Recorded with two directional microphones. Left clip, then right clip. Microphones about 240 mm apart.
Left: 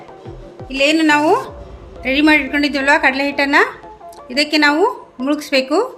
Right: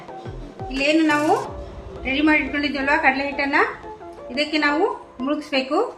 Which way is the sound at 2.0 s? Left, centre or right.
Left.